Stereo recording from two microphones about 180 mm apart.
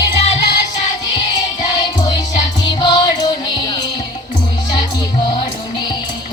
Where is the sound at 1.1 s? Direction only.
25° left (ahead or behind).